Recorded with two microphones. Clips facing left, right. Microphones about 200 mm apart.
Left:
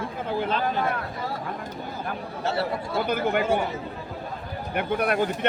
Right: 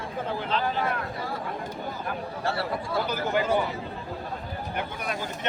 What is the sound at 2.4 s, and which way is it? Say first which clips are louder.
Speech: left 3 dB; 25° left (ahead or behind).